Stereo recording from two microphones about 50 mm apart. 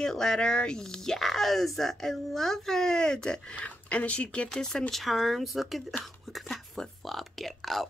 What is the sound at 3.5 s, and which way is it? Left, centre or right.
Speech, left.